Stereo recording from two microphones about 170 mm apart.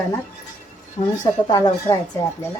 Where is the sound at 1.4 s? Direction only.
20° left (ahead or behind).